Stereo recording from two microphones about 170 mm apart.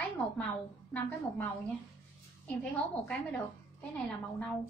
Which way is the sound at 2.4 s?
5° left (ahead or behind).